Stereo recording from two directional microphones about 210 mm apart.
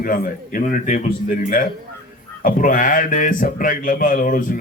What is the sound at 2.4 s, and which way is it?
Speech, 40° left (ahead or behind).